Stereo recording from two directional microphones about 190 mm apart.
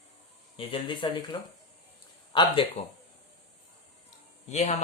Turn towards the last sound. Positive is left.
turn(degrees=35)  # may be behind; listen again after turning